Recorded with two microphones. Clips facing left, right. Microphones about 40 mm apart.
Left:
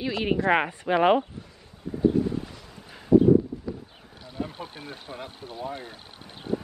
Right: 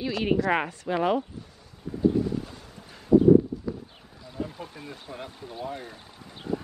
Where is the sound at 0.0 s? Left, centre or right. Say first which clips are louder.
Even; centre.